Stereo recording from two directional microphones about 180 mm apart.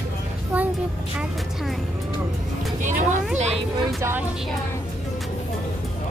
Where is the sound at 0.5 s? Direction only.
10° right (ahead or behind).